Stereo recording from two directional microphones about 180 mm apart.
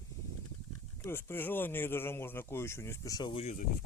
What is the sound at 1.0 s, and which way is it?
Speech, 10° left (ahead or behind).